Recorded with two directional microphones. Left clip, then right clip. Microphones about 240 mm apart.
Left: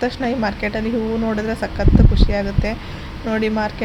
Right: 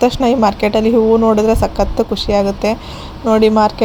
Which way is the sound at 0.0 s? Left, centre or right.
Right.